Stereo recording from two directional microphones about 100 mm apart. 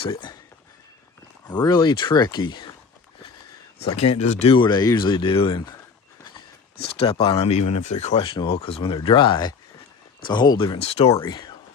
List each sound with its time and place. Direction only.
1.5 s speech: 50° left (ahead or behind)
3.8 s speech: 85° left
4.6 s speech: 45° left (ahead or behind); by 5.6 s 60° left (ahead or behind)
6.8 s speech: 70° left (ahead or behind)
8.8 s speech: 55° left (ahead or behind)
10.7 s speech: 75° left (ahead or behind)
11.3 s speech: 45° left (ahead or behind)